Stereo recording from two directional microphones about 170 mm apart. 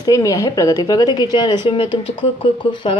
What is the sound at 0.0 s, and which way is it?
Speech, 20° left (ahead or behind).